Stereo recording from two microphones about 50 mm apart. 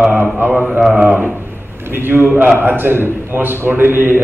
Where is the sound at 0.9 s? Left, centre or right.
Right.